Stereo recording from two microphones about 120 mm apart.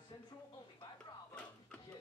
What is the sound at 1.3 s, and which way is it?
Music, 10° left (ahead or behind).